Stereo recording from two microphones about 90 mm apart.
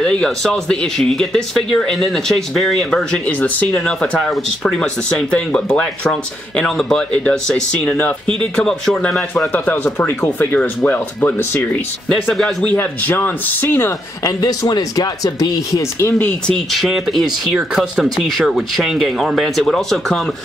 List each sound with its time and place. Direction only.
0.0 s speech: 10° left (ahead or behind)
3.3 s speech: 20° left (ahead or behind)
12.1 s speech: 5° left (ahead or behind)
12.6 s speech: 20° left (ahead or behind)
14.2 s speech: 40° left (ahead or behind)
16.2 s speech: 15° left (ahead or behind)
16.5 s speech: centre (ahead or behind)